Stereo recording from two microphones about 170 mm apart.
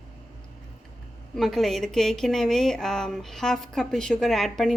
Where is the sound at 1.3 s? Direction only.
Centre (ahead or behind).